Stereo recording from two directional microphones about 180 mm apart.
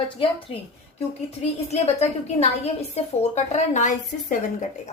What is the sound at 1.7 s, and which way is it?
A woman's voice, 35° left (ahead or behind).